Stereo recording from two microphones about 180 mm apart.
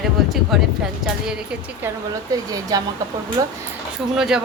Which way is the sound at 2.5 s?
20° right (ahead or behind).